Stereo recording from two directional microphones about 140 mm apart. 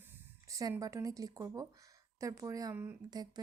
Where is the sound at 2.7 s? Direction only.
15° right (ahead or behind).